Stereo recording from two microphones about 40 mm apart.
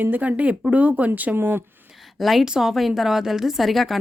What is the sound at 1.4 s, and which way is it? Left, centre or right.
Speech, right.